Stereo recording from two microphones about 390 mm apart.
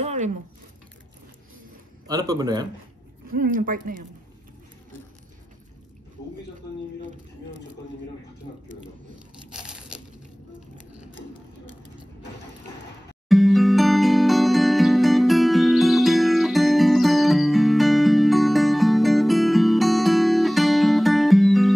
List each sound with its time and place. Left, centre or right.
0.0 s a sound: centre
2.0 s a man's voice: centre
3.3 s speech: right
9.5 s crushing: centre
13.3 s music: centre